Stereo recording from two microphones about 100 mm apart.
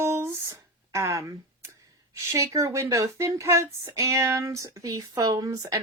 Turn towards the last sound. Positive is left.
turn(degrees=-35)  # may be behind; listen again after turning